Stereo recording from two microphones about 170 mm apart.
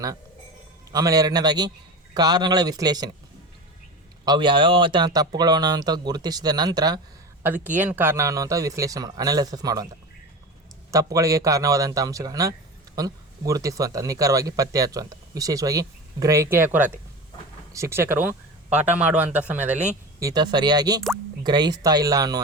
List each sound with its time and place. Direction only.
0.9 s speech: 20° right (ahead or behind)
4.3 s speech: 30° right (ahead or behind)
7.4 s speech: 10° right (ahead or behind)
10.9 s speech: 20° right (ahead or behind)
20.1 s speech: 20° right (ahead or behind)